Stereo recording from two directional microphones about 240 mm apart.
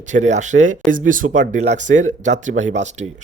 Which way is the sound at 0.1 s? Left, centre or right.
Right.